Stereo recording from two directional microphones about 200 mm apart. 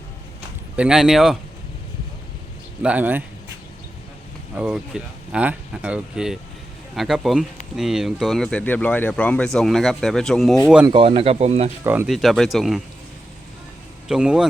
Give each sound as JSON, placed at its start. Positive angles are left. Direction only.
{"t": 0.8, "sound": "speech", "side_deg": -5}
{"t": 2.8, "sound": "speech", "side_deg": -10}
{"t": 4.5, "sound": "speech", "side_deg": -5}
{"t": 10.8, "sound": "speech", "side_deg": -25}
{"t": 11.8, "sound": "speech", "side_deg": -10}
{"t": 14.1, "sound": "speech", "side_deg": -5}